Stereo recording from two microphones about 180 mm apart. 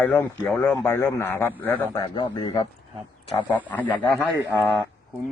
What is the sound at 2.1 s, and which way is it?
Speech, 25° left (ahead or behind).